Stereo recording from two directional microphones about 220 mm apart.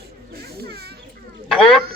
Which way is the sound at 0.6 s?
45° right (ahead or behind).